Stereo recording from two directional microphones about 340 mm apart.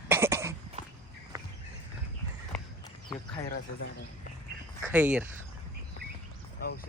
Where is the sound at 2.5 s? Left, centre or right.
Centre.